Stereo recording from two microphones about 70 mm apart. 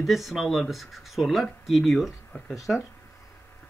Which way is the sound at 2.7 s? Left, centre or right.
Centre.